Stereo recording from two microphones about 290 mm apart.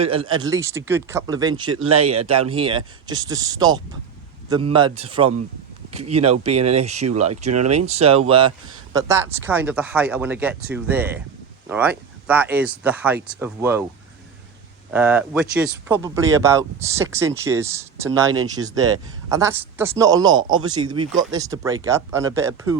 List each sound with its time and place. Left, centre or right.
0.0 s a man's voice: centre
14.8 s a man's voice: centre